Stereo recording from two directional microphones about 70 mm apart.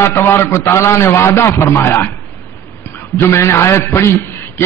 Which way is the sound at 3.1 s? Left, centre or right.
Left.